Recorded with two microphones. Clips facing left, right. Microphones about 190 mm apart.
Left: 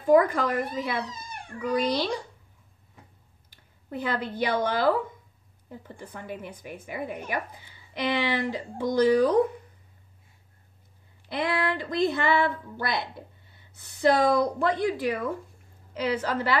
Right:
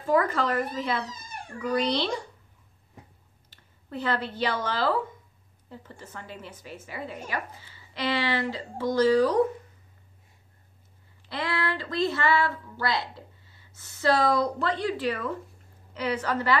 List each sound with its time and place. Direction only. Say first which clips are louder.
0.0 s a woman's voice: left 4 dB; 15° left (ahead or behind)
3.4 s a sound: left 4 dB; 15° left (ahead or behind)
4.6 s a woman's voice: left 3 dB; 15° left (ahead or behind)
11.2 s a woman's voice: left 3 dB; 20° left (ahead or behind)